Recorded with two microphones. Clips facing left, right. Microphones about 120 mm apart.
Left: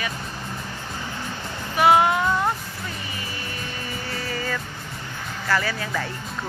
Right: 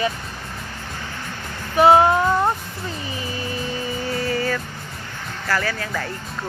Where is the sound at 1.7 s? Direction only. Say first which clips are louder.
Right 4 dB; 30° right (ahead or behind).